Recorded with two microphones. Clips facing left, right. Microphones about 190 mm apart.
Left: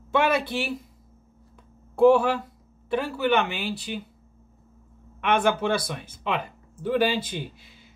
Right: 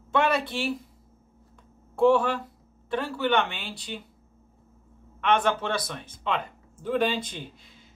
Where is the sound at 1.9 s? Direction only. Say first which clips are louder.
Left 3 dB; 5° left (ahead or behind).